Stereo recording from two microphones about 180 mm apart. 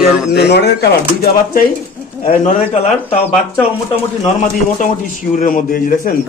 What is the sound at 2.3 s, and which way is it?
Speech, 45° left (ahead or behind).